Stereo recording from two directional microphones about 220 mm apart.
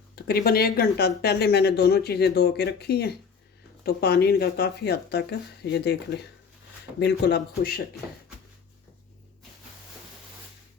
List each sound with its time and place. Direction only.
0.2 s speech: 45° left (ahead or behind)